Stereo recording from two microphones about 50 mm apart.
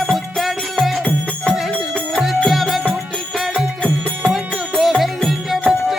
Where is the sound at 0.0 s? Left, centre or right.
Centre.